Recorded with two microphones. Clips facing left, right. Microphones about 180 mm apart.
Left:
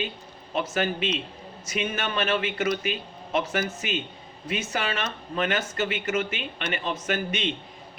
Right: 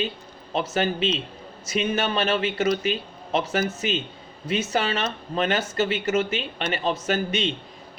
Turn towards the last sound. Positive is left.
turn(degrees=-35)  # may be behind; listen again after turning